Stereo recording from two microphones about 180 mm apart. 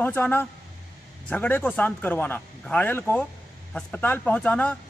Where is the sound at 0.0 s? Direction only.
10° left (ahead or behind).